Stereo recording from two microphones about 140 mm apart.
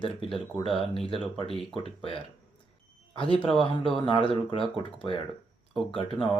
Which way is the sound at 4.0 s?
40° left (ahead or behind).